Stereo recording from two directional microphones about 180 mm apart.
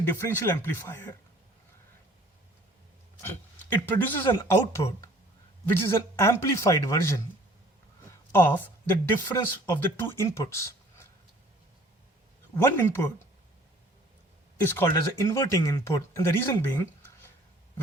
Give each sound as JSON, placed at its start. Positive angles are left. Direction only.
{"t": 0.0, "sound": "speech", "side_deg": 10}
{"t": 3.2, "sound": "speech", "side_deg": 10}
{"t": 8.3, "sound": "speech", "side_deg": 10}
{"t": 12.5, "sound": "speech", "side_deg": 10}
{"t": 14.6, "sound": "speech", "side_deg": 15}